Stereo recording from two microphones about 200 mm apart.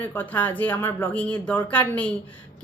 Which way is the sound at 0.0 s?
10° left (ahead or behind).